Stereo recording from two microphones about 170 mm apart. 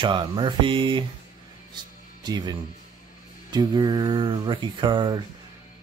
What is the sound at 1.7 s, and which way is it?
Music, 25° right (ahead or behind).